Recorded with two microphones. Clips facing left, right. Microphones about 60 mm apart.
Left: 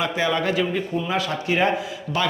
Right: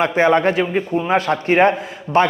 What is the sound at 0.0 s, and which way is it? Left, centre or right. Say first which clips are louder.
A man's voice: right 8 dB; right.